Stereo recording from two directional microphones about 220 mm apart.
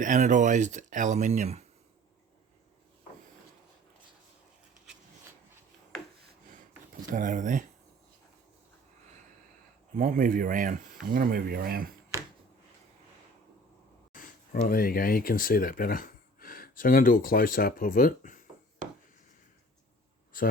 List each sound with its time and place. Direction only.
0.0 s speech: 35° right (ahead or behind)
7.1 s speech: 35° right (ahead or behind)
10.0 s speech: 40° right (ahead or behind)
14.1 s a sound: 40° left (ahead or behind)
14.7 s speech: 40° left (ahead or behind)